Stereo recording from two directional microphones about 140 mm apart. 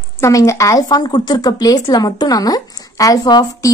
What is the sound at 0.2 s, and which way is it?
A woman's voice, 20° left (ahead or behind).